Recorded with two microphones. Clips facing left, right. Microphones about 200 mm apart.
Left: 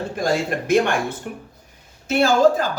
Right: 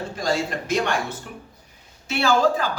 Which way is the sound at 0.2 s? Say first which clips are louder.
Left 3 dB; 55° left (ahead or behind).